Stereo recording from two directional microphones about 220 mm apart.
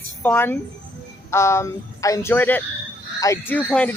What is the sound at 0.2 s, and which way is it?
A man's voice, 10° left (ahead or behind).